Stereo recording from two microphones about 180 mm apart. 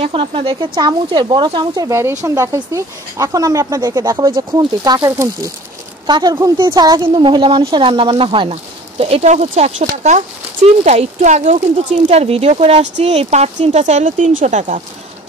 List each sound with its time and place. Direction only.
0.0 s a woman's voice: 30° right (ahead or behind)